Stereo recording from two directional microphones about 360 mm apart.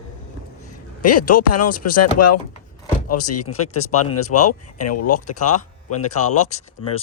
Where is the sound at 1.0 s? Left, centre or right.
Left.